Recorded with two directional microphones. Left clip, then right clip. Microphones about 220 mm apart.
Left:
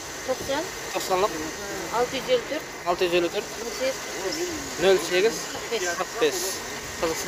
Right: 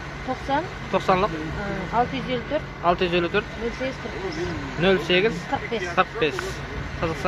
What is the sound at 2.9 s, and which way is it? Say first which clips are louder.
Speech: right 2 dB; 20° left (ahead or behind).